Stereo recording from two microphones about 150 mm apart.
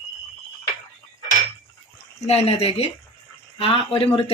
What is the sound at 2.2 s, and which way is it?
Speech, 40° left (ahead or behind).